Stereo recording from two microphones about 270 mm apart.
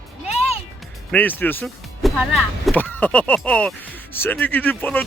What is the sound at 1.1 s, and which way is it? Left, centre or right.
A man's voice, centre.